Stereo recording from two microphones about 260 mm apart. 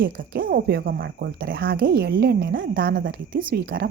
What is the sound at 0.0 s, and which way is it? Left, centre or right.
A woman's voice, right.